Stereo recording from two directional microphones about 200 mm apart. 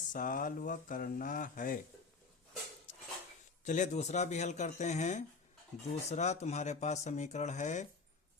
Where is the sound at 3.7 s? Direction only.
35° left (ahead or behind).